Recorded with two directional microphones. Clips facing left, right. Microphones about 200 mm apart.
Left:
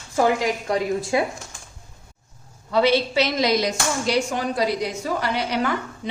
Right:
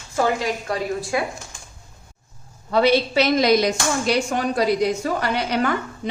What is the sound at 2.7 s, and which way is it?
A woman's voice, 50° right (ahead or behind).